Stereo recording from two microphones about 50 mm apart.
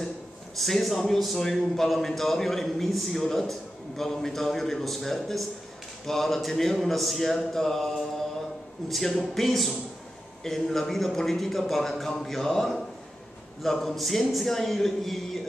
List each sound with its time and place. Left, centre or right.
0.6 s a man's voice: centre
8.4 s a sound: centre
9.2 s a man's voice: centre